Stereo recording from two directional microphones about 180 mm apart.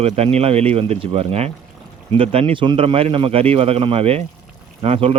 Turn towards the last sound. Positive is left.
turn(degrees=-35)  # may be behind; listen again after turning